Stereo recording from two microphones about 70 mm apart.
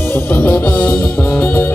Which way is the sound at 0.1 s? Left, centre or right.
Left.